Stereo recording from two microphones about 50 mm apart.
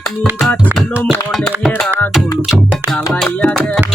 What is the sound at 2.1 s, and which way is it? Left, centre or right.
Music, centre.